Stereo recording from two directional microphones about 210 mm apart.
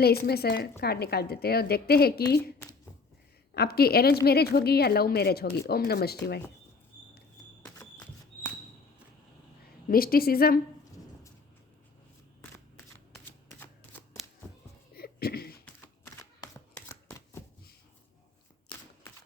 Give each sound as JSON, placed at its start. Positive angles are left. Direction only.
{"t": 0.0, "sound": "a woman's voice", "side_deg": 50}
{"t": 3.5, "sound": "a woman's voice", "side_deg": 50}
{"t": 7.6, "sound": "a sound", "side_deg": 10}
{"t": 9.9, "sound": "a woman's voice", "side_deg": 45}
{"t": 13.6, "sound": "shuffling cards", "side_deg": 10}
{"t": 14.9, "sound": "a sound", "side_deg": 50}
{"t": 16.9, "sound": "shuffling cards", "side_deg": 15}